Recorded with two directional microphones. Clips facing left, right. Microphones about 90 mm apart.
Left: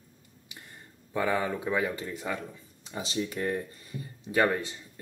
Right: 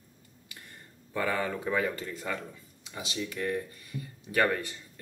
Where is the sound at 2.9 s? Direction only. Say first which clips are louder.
Left 4 dB; 30° left (ahead or behind).